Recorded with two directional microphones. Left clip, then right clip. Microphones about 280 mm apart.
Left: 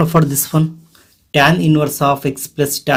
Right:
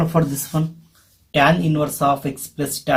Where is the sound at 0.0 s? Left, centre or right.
Left.